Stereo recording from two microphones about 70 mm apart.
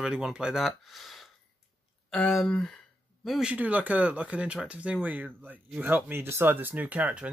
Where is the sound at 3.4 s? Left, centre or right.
Right.